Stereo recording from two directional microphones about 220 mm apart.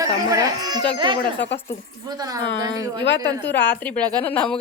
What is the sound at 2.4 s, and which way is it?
Speech, 55° left (ahead or behind).